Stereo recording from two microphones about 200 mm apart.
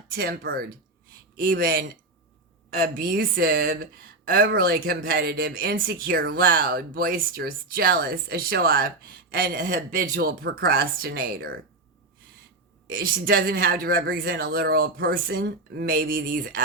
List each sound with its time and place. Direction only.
0.1 s speech: 50° right (ahead or behind)
12.9 s speech: 45° right (ahead or behind)